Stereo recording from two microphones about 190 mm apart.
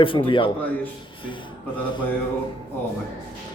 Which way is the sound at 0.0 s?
25° left (ahead or behind).